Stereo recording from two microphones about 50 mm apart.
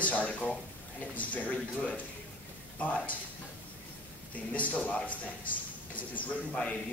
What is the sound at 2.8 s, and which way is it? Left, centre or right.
Speech, left.